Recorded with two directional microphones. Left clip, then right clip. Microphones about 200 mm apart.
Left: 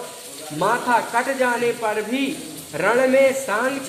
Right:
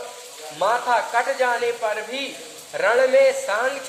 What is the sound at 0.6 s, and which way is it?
Speech, 10° left (ahead or behind).